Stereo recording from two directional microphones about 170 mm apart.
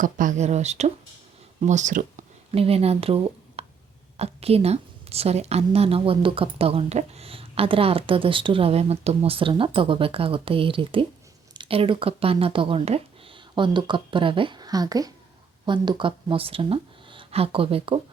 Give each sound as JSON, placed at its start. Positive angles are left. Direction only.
{"t": 0.0, "sound": "a woman's voice", "side_deg": -50}